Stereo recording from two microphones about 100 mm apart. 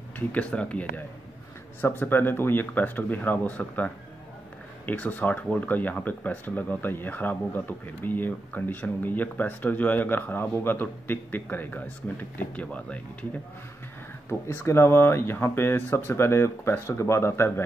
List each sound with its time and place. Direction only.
0.3 s speech: 10° left (ahead or behind)
14.3 s speech: 25° left (ahead or behind)